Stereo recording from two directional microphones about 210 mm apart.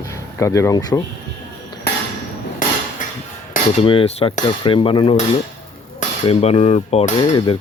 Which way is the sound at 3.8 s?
25° left (ahead or behind).